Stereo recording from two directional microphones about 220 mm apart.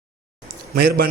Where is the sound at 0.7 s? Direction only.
45° right (ahead or behind).